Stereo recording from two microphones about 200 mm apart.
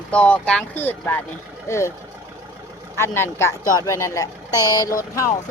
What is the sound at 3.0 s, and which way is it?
Speech, 10° left (ahead or behind).